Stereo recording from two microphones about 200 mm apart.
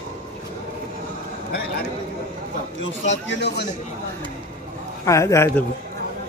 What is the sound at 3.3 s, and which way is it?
Speech, 60° left (ahead or behind).